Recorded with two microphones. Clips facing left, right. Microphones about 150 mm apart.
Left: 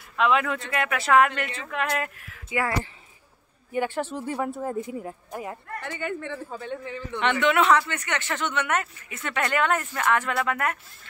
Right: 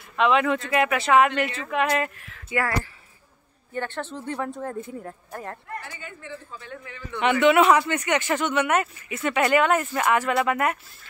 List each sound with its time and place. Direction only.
0.1 s speech: centre (ahead or behind)
5.8 s a woman's voice: 65° left (ahead or behind)
6.6 s a man's voice: 30° left (ahead or behind)
7.2 s speech: 5° right (ahead or behind)